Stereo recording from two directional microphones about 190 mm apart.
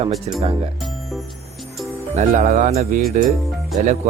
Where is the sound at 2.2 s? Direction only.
40° right (ahead or behind).